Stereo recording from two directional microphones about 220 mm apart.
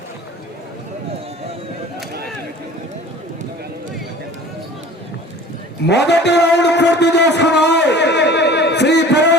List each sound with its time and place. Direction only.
5.9 s a man's voice: 50° left (ahead or behind)